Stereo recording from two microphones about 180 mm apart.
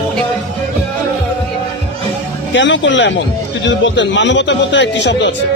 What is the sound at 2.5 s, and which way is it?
A man's voice, 90° left.